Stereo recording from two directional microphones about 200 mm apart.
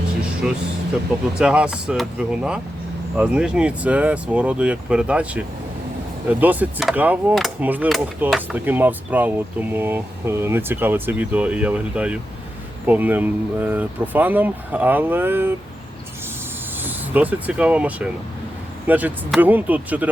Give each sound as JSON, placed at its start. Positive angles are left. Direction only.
{"t": 0.4, "sound": "speech", "side_deg": -5}
{"t": 16.8, "sound": "speech", "side_deg": -10}